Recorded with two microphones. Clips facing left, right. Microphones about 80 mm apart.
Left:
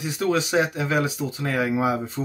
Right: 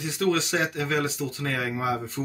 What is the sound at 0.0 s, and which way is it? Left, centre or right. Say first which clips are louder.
Speech: left 2 dB; centre.